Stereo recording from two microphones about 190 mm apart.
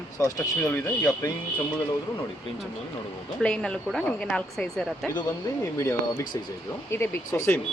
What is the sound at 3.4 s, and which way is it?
Speech, 5° left (ahead or behind).